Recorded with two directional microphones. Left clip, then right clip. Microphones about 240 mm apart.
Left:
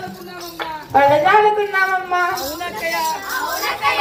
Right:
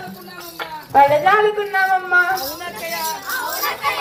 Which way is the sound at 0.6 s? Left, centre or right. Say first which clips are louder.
Right 1 dB; right.